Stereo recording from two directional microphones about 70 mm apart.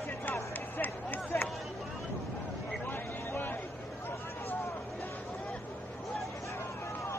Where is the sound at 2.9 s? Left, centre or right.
Left.